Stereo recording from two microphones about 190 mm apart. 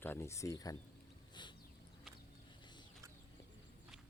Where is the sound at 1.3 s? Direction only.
25° left (ahead or behind).